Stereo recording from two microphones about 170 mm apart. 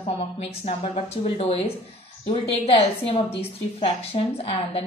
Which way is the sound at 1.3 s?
35° left (ahead or behind).